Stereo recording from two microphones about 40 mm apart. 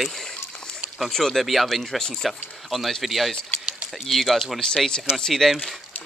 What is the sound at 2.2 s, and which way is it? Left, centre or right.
Speech, centre.